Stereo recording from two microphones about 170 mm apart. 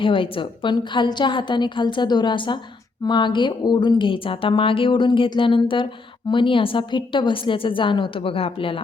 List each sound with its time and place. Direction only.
0.0 s a woman's voice: 30° left (ahead or behind)